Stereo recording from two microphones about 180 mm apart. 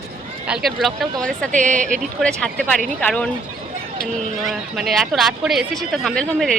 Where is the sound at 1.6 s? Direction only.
45° right (ahead or behind).